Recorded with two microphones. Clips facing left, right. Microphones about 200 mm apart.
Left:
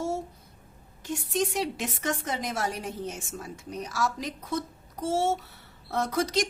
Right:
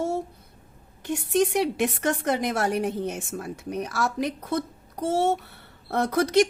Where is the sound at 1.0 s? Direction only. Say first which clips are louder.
Right 6 dB; 60° right (ahead or behind).